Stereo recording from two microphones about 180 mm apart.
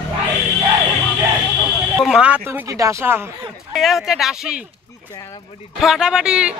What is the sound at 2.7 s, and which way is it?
Speech, 15° right (ahead or behind).